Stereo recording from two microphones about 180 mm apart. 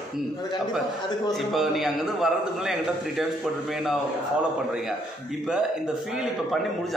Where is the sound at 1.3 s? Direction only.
Centre (ahead or behind).